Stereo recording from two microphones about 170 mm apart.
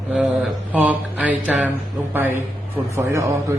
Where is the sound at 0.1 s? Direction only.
5° right (ahead or behind).